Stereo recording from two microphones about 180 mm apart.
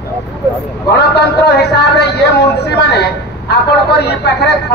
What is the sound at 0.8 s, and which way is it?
A man's voice, 65° left (ahead or behind).